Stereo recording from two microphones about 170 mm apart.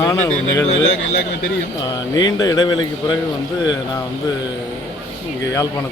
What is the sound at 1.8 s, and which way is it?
Speech, 25° left (ahead or behind).